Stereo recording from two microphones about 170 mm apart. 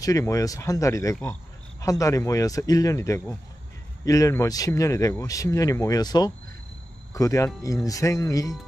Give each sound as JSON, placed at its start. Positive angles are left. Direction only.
{"t": 0.0, "sound": "speech", "side_deg": 20}